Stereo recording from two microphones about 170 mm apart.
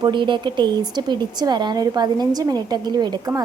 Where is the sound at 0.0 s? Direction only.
30° right (ahead or behind).